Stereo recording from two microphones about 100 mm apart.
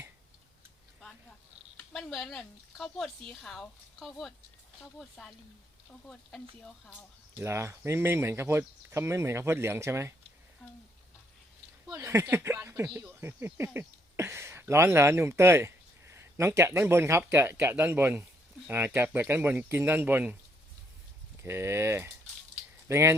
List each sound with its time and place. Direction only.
1.9 s a woman's voice: centre (ahead or behind)
7.3 s speech: 25° right (ahead or behind)
11.9 s speech: 30° right (ahead or behind)
21.4 s speech: 25° right (ahead or behind)